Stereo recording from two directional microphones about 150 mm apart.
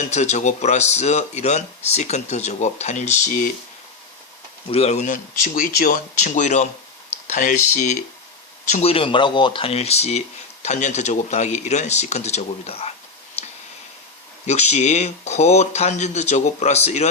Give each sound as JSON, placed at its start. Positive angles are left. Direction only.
{"t": 0.0, "sound": "speech", "side_deg": 50}
{"t": 4.7, "sound": "speech", "side_deg": 45}
{"t": 8.7, "sound": "speech", "side_deg": 40}
{"t": 14.4, "sound": "speech", "side_deg": 50}